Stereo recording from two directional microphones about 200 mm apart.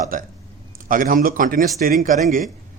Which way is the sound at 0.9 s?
45° right (ahead or behind).